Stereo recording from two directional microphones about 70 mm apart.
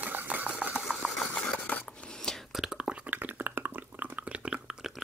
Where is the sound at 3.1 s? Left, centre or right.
Right.